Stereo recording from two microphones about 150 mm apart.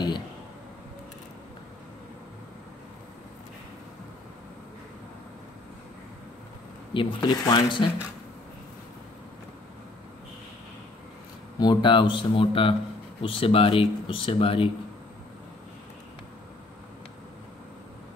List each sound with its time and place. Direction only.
6.9 s speech: 30° left (ahead or behind)
11.6 s speech: 30° left (ahead or behind)